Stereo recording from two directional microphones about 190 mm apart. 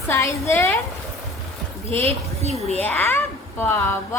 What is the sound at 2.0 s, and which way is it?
Speech, 35° right (ahead or behind).